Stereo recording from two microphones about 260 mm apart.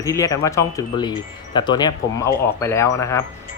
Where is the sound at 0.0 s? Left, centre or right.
Centre.